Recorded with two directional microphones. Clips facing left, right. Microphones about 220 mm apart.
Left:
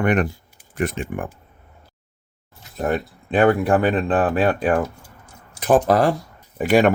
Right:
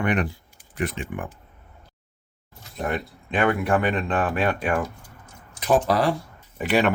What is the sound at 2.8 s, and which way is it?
Speech, 40° left (ahead or behind).